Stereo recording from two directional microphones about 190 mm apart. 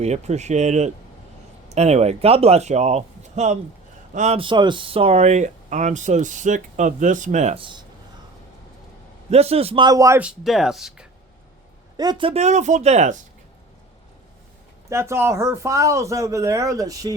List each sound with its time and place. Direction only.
0.0 s speech: 35° right (ahead or behind)
9.3 s speech: 35° right (ahead or behind); by 11.0 s centre (ahead or behind)
11.9 s speech: 25° right (ahead or behind)
14.8 s speech: 15° right (ahead or behind)